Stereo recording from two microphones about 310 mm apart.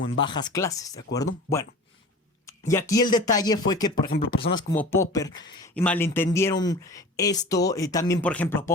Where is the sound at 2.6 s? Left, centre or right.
Centre.